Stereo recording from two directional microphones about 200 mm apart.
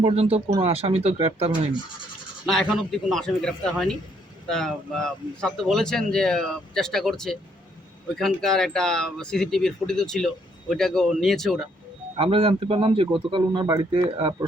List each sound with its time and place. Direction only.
0.0 s speech: 30° right (ahead or behind)
2.5 s speech: centre (ahead or behind)
12.1 s speech: 25° right (ahead or behind)